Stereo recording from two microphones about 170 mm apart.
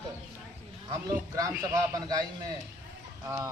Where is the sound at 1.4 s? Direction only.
15° right (ahead or behind).